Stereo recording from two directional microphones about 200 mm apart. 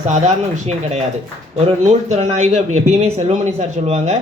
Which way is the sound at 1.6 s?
35° right (ahead or behind).